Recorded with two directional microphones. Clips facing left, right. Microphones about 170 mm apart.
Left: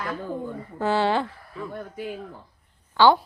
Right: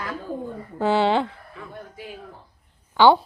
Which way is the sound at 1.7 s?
55° left (ahead or behind).